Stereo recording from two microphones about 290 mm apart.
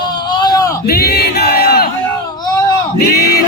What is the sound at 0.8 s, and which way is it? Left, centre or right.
Battle cry, left.